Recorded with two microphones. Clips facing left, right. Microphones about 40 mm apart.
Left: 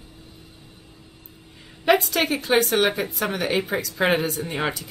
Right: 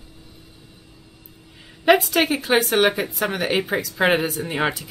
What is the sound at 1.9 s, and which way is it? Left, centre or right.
Speech, centre.